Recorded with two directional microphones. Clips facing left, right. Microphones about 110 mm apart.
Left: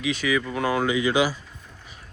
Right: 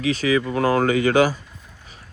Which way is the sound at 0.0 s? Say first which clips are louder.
Right 4 dB; 40° right (ahead or behind).